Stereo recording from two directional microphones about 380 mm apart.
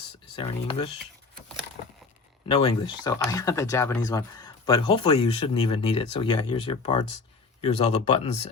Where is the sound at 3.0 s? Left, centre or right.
Centre.